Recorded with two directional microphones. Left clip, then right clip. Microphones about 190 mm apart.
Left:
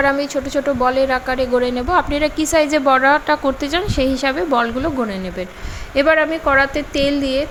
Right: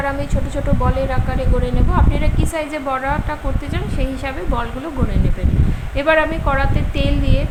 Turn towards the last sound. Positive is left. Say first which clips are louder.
# left 5 dB
turn(degrees=30)  # may be behind; listen again after turning